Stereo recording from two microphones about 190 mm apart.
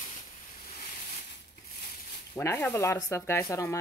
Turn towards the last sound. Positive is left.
turn(degrees=15)  # may be behind; listen again after turning